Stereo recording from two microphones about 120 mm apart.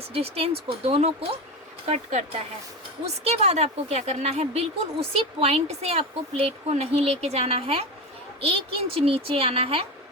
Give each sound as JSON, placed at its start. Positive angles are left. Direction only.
{"t": 0.1, "sound": "a woman's voice", "side_deg": -55}
{"t": 1.9, "sound": "speech", "side_deg": -80}
{"t": 3.2, "sound": "a woman's voice", "side_deg": -65}